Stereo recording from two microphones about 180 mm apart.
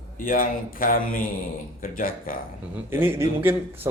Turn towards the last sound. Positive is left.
turn(degrees=-15)  # may be behind; listen again after turning